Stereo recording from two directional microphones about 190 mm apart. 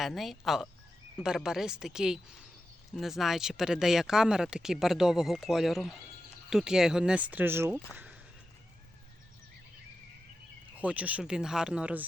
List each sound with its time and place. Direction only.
0.0 s speech: centre (ahead or behind)
10.8 s speech: 5° right (ahead or behind)